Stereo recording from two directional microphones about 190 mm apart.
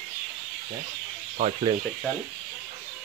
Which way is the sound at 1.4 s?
40° right (ahead or behind).